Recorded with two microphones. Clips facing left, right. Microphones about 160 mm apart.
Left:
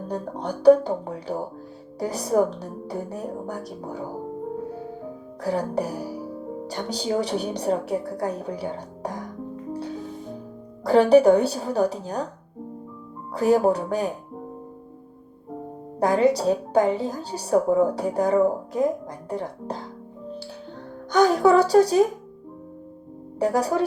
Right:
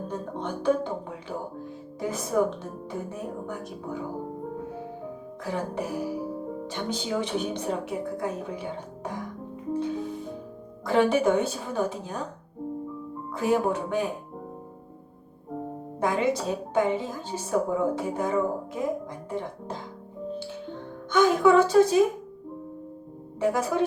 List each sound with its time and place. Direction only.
0.1 s a woman's voice: 35° left (ahead or behind)
5.4 s a woman's voice: 35° left (ahead or behind)
10.8 s a woman's voice: 35° left (ahead or behind)
13.3 s a woman's voice: 40° left (ahead or behind)
16.0 s a woman's voice: 40° left (ahead or behind)
21.1 s a woman's voice: 35° left (ahead or behind)
23.4 s a woman's voice: 35° left (ahead or behind)